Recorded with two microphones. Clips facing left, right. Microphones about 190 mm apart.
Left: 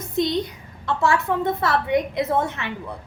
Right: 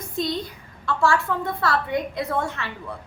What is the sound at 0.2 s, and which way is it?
A woman's voice, 20° left (ahead or behind).